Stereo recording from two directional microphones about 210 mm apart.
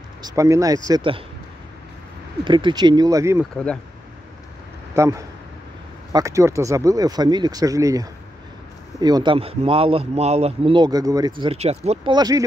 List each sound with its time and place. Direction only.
0.2 s a man's voice: 15° right (ahead or behind)
2.4 s a man's voice: 20° right (ahead or behind)
3.5 s speech: 5° left (ahead or behind)
4.9 s a man's voice: 15° right (ahead or behind)